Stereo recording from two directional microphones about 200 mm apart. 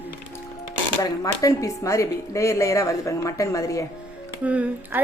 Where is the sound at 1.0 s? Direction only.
15° left (ahead or behind).